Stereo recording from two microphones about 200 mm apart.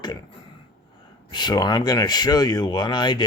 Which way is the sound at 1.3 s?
20° left (ahead or behind).